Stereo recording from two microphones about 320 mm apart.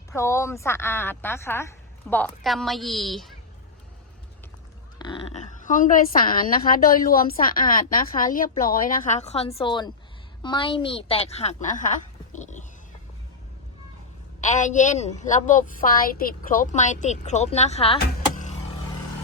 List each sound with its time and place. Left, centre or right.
0.1 s speech: centre
4.9 s a woman's voice: centre
14.4 s a woman's voice: left